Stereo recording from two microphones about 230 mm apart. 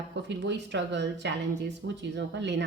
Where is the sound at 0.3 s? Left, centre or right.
Right.